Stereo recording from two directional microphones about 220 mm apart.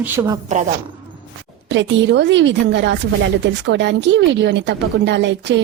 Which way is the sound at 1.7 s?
55° right (ahead or behind).